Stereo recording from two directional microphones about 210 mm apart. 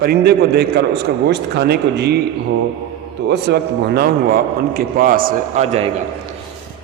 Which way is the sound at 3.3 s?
50° right (ahead or behind).